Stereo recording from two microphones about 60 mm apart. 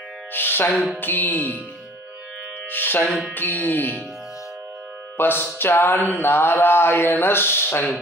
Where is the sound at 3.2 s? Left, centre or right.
Left.